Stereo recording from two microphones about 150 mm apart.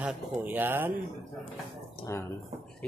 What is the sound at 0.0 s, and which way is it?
Speech, 10° right (ahead or behind).